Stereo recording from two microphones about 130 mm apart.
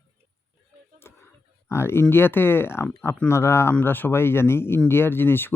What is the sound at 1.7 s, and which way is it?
Speech, 20° left (ahead or behind).